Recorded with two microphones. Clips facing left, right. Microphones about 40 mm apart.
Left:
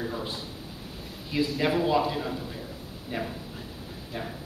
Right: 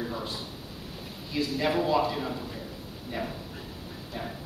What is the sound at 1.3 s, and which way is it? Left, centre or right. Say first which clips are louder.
Speech: left 3 dB; left.